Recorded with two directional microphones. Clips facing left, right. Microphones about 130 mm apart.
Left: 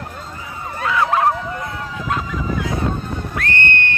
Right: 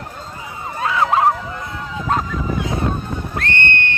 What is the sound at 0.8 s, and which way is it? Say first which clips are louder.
Emergency vehicle: right 1 dB; 25° right (ahead or behind).